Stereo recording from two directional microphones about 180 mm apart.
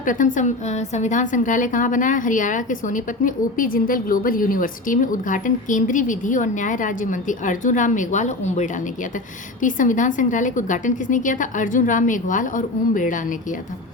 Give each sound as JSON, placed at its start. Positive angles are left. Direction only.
{"t": 0.0, "sound": "a woman's voice", "side_deg": 45}